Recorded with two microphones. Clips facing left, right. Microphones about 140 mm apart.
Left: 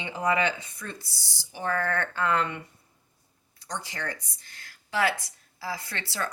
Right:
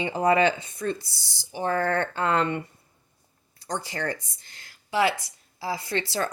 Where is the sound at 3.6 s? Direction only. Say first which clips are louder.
Right 5 dB; 35° right (ahead or behind).